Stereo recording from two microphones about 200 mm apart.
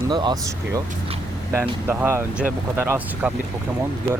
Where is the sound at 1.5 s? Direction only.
10° right (ahead or behind).